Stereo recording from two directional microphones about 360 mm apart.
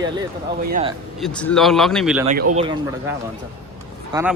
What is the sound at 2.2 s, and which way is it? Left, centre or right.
Speech, right.